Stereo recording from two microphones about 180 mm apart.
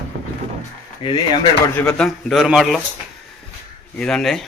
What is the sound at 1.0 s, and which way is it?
Speech, 30° left (ahead or behind).